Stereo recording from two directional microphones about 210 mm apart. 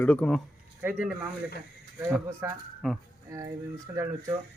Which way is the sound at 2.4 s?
15° right (ahead or behind).